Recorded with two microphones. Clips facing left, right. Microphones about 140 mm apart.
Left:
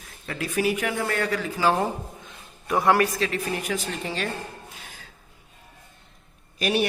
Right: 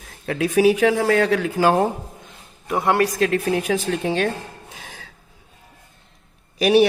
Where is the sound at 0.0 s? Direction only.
70° right (ahead or behind).